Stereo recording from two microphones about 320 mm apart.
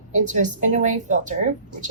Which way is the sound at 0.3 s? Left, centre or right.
Right.